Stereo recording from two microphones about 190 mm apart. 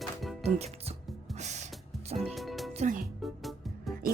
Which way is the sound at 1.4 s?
40° right (ahead or behind).